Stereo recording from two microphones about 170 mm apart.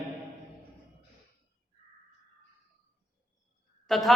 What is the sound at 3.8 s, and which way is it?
Speech, centre (ahead or behind).